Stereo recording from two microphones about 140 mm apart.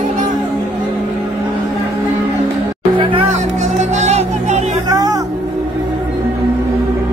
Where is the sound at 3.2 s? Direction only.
55° right (ahead or behind).